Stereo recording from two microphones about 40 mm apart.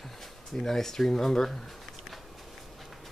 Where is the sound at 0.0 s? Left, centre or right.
Centre.